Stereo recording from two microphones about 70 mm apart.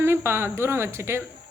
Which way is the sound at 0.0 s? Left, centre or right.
Right.